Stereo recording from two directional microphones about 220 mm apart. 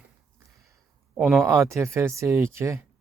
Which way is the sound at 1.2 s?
5° right (ahead or behind).